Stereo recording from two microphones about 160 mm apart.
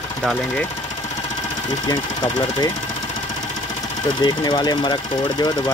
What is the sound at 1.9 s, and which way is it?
Speech, 25° left (ahead or behind).